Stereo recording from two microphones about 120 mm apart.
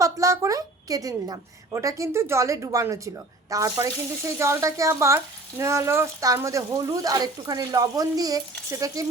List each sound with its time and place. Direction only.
0.0 s speech: 25° right (ahead or behind)